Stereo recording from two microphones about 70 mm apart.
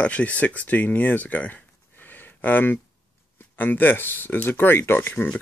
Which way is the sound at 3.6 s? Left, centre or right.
Left.